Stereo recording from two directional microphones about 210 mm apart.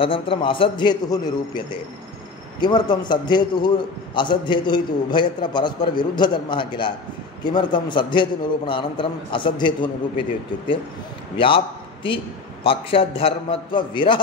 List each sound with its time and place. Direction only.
0.0 s a man's voice: 25° left (ahead or behind)
11.3 s a man's voice: 25° left (ahead or behind)